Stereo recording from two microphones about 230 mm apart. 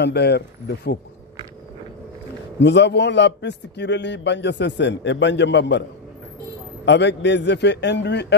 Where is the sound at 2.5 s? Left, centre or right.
Left.